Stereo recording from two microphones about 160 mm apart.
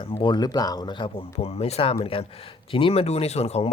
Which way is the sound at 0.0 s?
30° left (ahead or behind).